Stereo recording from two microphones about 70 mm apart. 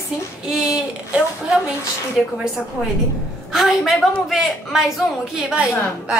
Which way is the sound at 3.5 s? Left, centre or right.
Centre.